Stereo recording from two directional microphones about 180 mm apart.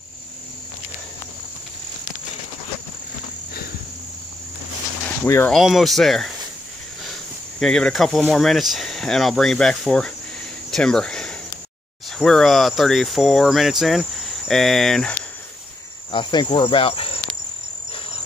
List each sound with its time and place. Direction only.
5.2 s speech: 10° left (ahead or behind)
5.5 s speech: centre (ahead or behind)
7.6 s speech: 5° left (ahead or behind)
10.7 s a sound: 5° left (ahead or behind)
12.2 s speech: centre (ahead or behind)
16.1 s speech: 25° left (ahead or behind)